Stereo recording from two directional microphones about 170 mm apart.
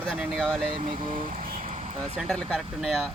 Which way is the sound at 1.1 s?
50° right (ahead or behind).